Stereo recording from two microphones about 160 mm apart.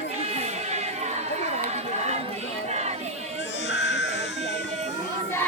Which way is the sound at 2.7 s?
45° right (ahead or behind).